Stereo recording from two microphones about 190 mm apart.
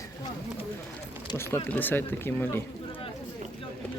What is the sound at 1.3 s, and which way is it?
Speech, 15° left (ahead or behind).